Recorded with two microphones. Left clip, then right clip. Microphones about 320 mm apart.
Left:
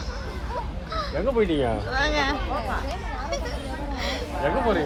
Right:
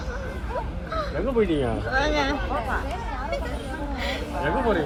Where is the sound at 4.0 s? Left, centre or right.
Centre.